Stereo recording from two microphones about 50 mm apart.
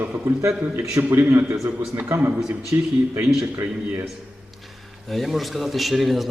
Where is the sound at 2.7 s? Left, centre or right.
Right.